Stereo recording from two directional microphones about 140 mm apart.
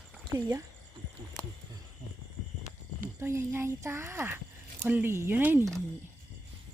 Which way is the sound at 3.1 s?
20° right (ahead or behind).